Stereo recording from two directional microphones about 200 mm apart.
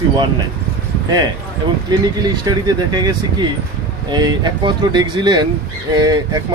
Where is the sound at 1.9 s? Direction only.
20° right (ahead or behind).